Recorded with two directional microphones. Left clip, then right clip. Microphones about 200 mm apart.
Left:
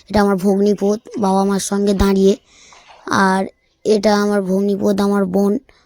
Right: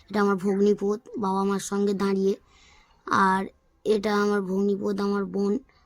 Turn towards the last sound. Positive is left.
turn(degrees=20)  # may be behind; listen again after turning